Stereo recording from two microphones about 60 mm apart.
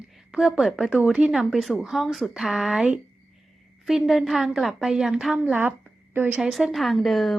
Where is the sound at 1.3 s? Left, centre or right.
Centre.